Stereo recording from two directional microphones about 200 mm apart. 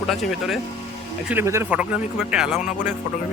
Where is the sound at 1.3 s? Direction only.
10° right (ahead or behind).